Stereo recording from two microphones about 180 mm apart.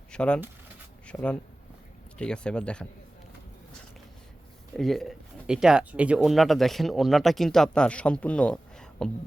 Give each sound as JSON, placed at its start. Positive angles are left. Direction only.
{"t": 0.1, "sound": "speech", "side_deg": 5}
{"t": 4.8, "sound": "speech", "side_deg": 0}